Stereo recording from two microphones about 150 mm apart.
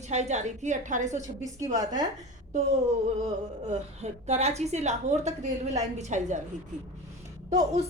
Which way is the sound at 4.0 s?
45° right (ahead or behind).